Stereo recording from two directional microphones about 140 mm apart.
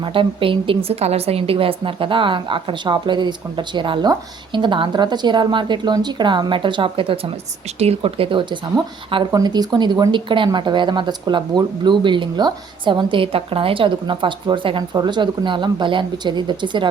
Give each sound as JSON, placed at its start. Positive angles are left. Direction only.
{"t": 0.0, "sound": "speech", "side_deg": -40}